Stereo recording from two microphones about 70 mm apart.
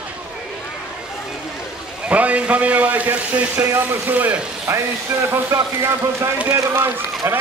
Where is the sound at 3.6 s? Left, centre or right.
Right.